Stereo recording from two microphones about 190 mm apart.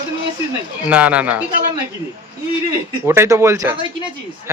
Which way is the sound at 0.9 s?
5° right (ahead or behind).